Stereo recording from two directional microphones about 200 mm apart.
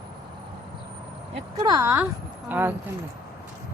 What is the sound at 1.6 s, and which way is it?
Speech, 20° right (ahead or behind).